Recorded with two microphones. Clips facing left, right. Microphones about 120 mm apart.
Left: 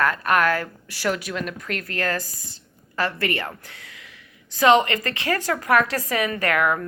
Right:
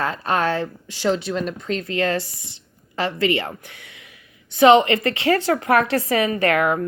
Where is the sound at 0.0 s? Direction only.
25° right (ahead or behind).